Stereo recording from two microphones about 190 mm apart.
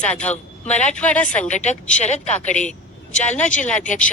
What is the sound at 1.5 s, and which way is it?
A woman's voice, 40° left (ahead or behind).